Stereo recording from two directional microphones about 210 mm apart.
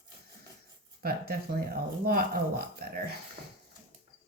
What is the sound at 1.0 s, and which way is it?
Speech, 45° right (ahead or behind).